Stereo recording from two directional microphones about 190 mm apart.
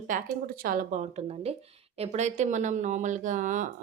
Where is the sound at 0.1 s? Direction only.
45° right (ahead or behind).